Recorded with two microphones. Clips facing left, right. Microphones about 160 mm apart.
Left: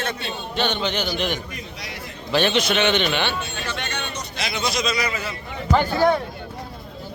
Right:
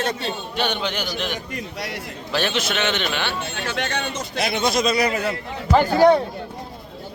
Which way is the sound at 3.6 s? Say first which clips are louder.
Right 4 dB; 90° right.